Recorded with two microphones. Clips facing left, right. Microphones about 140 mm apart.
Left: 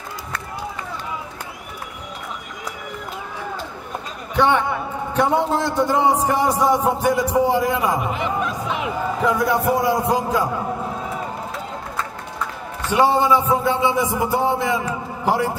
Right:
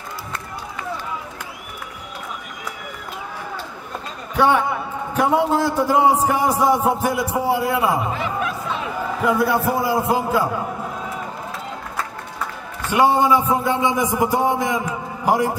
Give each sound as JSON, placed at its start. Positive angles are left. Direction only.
{"t": 4.4, "sound": "a man's voice", "side_deg": -5}
{"t": 8.5, "sound": "a sound", "side_deg": 15}
{"t": 9.2, "sound": "a man's voice", "side_deg": -5}
{"t": 12.9, "sound": "a man's voice", "side_deg": -10}